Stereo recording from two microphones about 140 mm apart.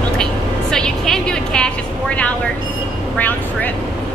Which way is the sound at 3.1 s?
10° left (ahead or behind).